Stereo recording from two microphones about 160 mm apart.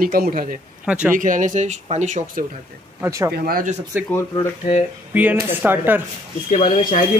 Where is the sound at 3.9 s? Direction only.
10° right (ahead or behind).